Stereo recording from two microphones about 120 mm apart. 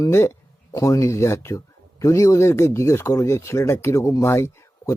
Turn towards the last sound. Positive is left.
turn(degrees=20)  # may be behind; listen again after turning